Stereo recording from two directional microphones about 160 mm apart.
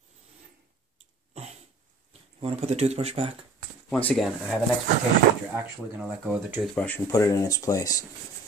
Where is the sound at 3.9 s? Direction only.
5° left (ahead or behind).